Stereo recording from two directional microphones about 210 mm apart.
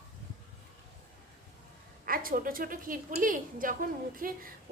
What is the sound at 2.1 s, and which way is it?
A woman's voice, 45° right (ahead or behind).